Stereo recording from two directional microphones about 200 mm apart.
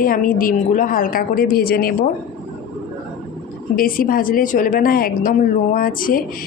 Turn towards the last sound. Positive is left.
turn(degrees=45)  # may be behind; listen again after turning